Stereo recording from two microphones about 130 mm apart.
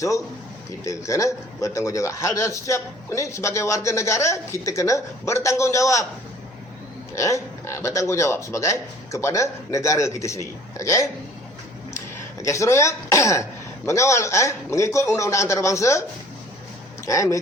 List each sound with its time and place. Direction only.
0.9 s speech: 25° left (ahead or behind)
7.2 s speech: 20° left (ahead or behind)
17.1 s speech: 25° left (ahead or behind)